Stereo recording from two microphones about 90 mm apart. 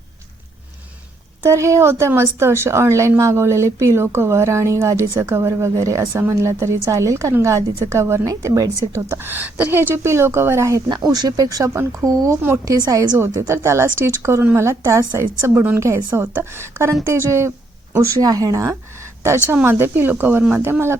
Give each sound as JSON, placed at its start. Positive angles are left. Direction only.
{"t": 1.4, "sound": "a woman's voice", "side_deg": -30}
{"t": 10.8, "sound": "a woman's voice", "side_deg": -50}
{"t": 13.1, "sound": "a woman's voice", "side_deg": -30}